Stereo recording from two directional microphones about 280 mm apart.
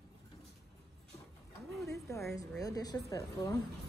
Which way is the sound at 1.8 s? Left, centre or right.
Centre.